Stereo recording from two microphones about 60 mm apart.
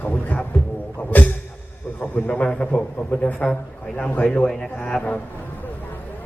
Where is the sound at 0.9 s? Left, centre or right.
Left.